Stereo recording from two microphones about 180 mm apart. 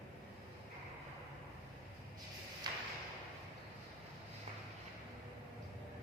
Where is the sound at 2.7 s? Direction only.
25° right (ahead or behind).